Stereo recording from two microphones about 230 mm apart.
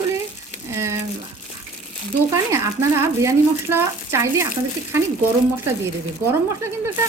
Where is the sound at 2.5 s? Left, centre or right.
Centre.